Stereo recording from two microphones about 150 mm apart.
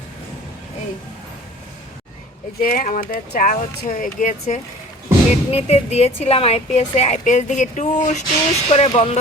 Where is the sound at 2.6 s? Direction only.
60° left (ahead or behind).